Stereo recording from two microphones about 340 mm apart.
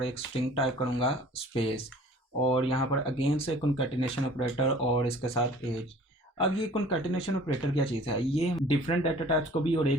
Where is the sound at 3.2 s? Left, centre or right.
Centre.